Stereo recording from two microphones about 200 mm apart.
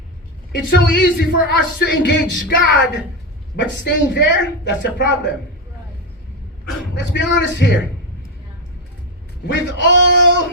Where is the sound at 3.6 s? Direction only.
60° left (ahead or behind).